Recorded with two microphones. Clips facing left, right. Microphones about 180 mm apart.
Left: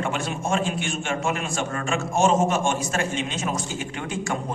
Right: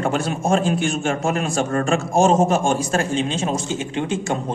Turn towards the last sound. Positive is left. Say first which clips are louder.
# right 6 dB
turn(degrees=-25)  # may be behind; listen again after turning